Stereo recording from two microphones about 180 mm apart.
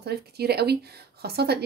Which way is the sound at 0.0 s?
65° right (ahead or behind).